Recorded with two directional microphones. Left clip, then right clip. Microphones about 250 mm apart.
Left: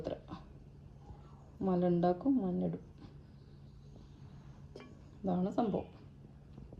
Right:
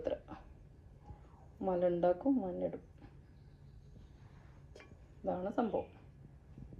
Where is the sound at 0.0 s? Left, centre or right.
Right.